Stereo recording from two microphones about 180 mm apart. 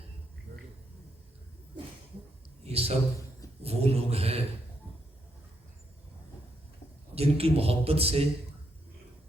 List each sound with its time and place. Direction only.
2.6 s a man's voice: 35° right (ahead or behind)
7.2 s a man's voice: 35° right (ahead or behind)